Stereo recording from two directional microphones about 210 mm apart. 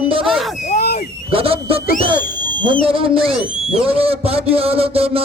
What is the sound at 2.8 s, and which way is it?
A man's voice, 25° right (ahead or behind).